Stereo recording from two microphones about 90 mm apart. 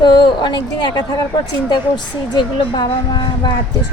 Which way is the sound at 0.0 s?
55° left (ahead or behind).